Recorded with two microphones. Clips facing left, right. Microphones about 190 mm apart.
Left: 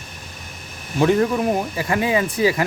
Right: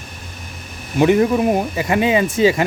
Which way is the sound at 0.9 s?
15° right (ahead or behind).